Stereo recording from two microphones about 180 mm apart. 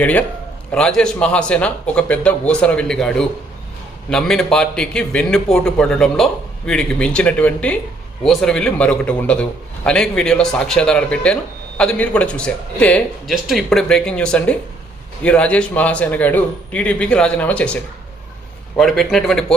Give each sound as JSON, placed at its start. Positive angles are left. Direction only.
{"t": 0.0, "sound": "a man's voice", "side_deg": 10}
{"t": 18.8, "sound": "a man's voice", "side_deg": 0}